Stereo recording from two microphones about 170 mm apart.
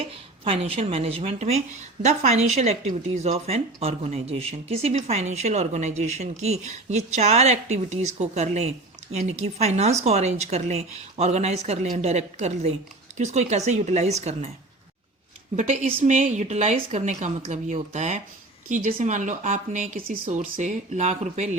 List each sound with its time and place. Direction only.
0.0 s speech: 35° right (ahead or behind)
15.5 s speech: 45° right (ahead or behind)